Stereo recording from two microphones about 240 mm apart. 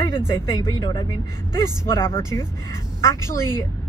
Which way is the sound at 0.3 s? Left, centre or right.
Centre.